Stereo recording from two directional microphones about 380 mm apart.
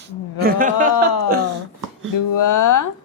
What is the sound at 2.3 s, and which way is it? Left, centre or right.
Speech, left.